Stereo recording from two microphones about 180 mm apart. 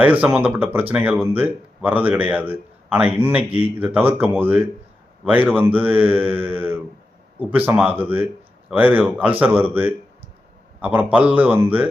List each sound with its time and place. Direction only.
0.0 s speech: 10° right (ahead or behind)